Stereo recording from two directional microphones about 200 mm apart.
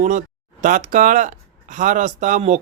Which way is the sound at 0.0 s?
40° right (ahead or behind).